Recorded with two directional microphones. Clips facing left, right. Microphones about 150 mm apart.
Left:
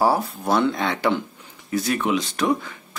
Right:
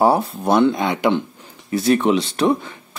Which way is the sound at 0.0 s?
25° right (ahead or behind).